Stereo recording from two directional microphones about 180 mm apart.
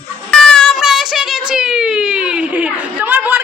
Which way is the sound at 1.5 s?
5° right (ahead or behind).